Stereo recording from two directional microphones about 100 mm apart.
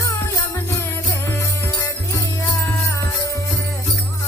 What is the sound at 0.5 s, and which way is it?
Music, 25° left (ahead or behind).